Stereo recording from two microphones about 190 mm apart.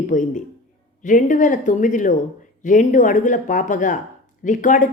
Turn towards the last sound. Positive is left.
turn(degrees=40)  # may be behind; listen again after turning